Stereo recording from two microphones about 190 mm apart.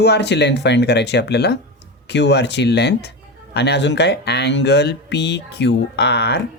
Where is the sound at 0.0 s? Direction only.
60° left (ahead or behind).